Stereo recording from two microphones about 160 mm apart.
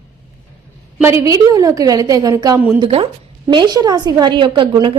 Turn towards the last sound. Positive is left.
turn(degrees=-30)  # may be behind; listen again after turning